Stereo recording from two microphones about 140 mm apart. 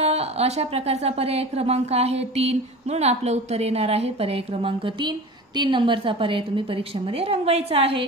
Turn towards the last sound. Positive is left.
turn(degrees=-45)  # may be behind; listen again after turning